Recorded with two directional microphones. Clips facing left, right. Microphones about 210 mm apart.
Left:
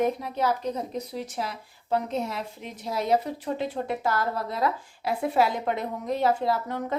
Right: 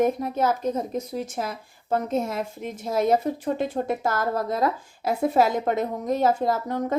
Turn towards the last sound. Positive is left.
turn(degrees=-40)  # may be behind; listen again after turning